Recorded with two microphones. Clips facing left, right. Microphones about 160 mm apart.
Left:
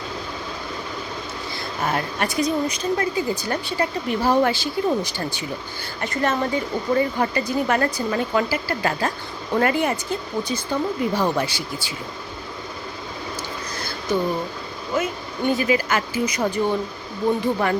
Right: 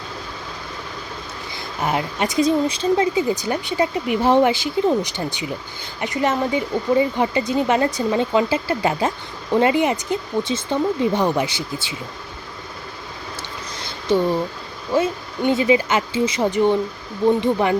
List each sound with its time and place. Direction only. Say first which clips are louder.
1.5 s speech: right 2 dB; 20° right (ahead or behind)
14.9 s speech: right 5 dB; 25° right (ahead or behind)